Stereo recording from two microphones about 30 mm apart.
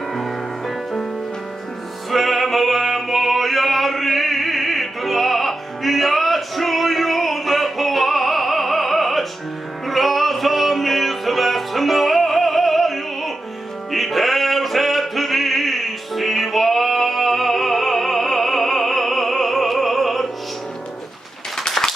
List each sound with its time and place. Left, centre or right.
0.1 s music: centre
2.0 s music: centre
21.5 s a sound: centre